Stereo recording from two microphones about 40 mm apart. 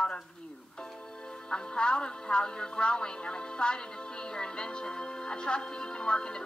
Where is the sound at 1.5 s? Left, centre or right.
Left.